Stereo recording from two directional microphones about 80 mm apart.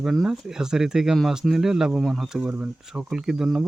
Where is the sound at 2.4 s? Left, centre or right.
Centre.